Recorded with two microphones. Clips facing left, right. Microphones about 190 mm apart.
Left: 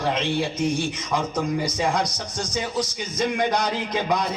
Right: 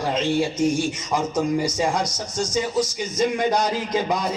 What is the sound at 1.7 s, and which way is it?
Speech, 60° left (ahead or behind).